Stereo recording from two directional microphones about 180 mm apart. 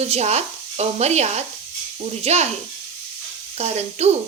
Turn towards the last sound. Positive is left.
turn(degrees=-40)  # may be behind; listen again after turning